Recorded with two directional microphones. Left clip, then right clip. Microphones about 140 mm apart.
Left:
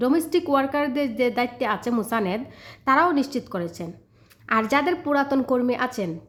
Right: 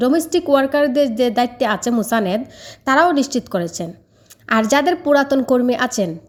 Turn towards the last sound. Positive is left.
turn(degrees=-35)  # may be behind; listen again after turning